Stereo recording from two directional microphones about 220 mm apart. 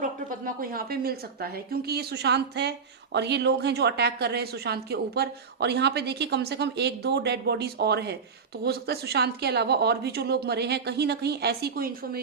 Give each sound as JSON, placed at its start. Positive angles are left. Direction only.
{"t": 0.0, "sound": "a woman's voice", "side_deg": -40}